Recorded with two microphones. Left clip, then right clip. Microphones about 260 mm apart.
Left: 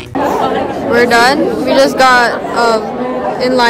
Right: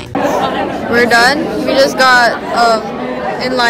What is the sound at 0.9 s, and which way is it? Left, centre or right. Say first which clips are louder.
A woman's voice: left 1 dB; centre.